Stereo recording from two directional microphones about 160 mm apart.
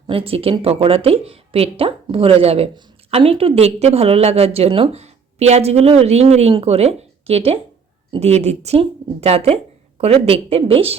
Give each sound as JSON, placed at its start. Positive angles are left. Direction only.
{"t": 0.1, "sound": "a woman's voice", "side_deg": -35}